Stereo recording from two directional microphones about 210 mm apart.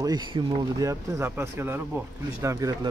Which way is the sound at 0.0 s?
20° right (ahead or behind).